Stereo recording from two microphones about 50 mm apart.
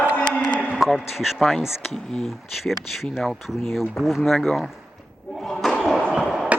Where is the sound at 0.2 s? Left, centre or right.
Left.